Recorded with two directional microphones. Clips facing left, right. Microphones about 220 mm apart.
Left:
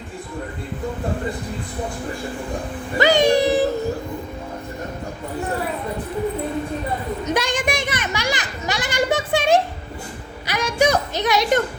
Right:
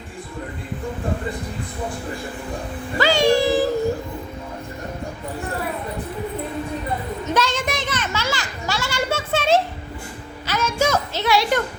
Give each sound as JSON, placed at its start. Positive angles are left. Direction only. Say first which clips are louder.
{"t": 3.0, "sound": "a sound", "louder": "left 1 dB", "side_deg": 20}
{"t": 7.3, "sound": "children playing", "louder": "even", "side_deg": 15}
{"t": 10.4, "sound": "music", "louder": "left 2 dB", "side_deg": 15}